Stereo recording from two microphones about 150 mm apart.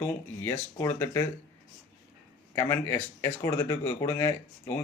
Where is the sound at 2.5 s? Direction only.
15° left (ahead or behind).